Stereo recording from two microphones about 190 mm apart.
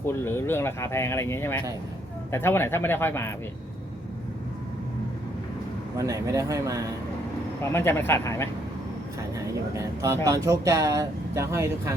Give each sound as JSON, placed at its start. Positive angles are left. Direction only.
{"t": 0.0, "sound": "speech", "side_deg": 10}
{"t": 6.0, "sound": "speech", "side_deg": -15}
{"t": 7.6, "sound": "speech", "side_deg": 10}
{"t": 9.7, "sound": "speech", "side_deg": -15}